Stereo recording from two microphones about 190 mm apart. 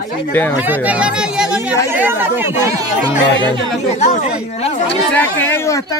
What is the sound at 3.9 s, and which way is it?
Speech, 35° left (ahead or behind).